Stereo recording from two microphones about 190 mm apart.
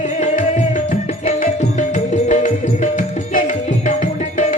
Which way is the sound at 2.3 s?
40° left (ahead or behind).